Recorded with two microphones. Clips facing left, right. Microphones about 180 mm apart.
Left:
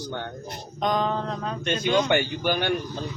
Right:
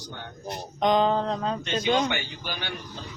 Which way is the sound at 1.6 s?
55° left (ahead or behind).